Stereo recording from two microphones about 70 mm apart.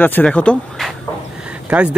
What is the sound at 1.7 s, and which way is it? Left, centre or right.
Speech, centre.